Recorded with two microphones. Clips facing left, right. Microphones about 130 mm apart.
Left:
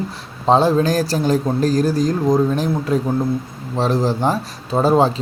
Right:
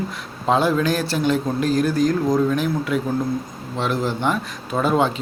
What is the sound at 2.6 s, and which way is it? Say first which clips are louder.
Speech: left 3 dB; 35° left (ahead or behind).